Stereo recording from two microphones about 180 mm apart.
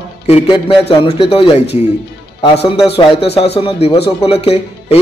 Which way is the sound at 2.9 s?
30° left (ahead or behind).